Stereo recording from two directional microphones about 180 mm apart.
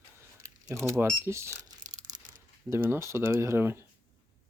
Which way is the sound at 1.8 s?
45° right (ahead or behind).